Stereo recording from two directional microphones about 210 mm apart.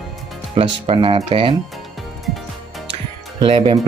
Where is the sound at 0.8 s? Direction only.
25° right (ahead or behind).